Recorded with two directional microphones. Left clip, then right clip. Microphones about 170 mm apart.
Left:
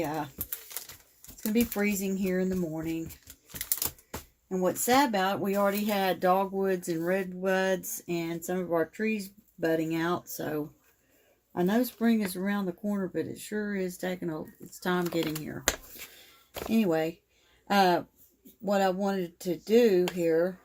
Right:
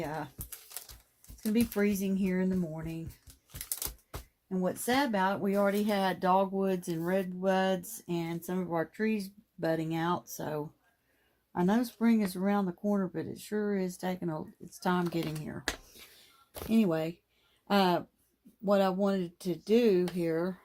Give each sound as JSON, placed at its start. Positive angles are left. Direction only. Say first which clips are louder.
{"t": 1.7, "sound": "speech", "louder": "left 1 dB", "side_deg": -35}
{"t": 4.4, "sound": "speech", "louder": "left 5 dB", "side_deg": -25}
{"t": 16.8, "sound": "speech", "louder": "left 4 dB", "side_deg": -40}